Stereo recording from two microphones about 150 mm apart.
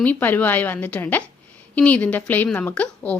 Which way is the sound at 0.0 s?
10° left (ahead or behind).